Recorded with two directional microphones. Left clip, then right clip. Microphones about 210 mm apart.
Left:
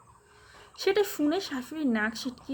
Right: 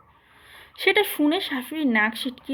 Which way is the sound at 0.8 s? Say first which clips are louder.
Right 6 dB; 15° left (ahead or behind).